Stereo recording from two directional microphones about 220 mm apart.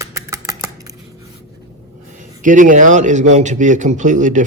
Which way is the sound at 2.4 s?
35° right (ahead or behind).